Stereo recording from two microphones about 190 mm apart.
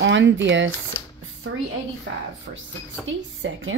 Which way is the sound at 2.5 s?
55° right (ahead or behind).